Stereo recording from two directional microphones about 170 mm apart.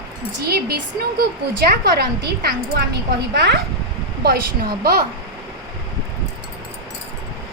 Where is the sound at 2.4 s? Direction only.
65° right (ahead or behind).